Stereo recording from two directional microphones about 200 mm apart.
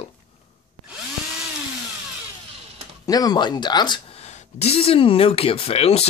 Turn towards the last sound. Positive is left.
turn(degrees=30)  # may be behind; listen again after turning